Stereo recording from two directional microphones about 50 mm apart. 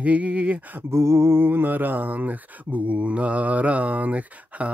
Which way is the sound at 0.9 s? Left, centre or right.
Right.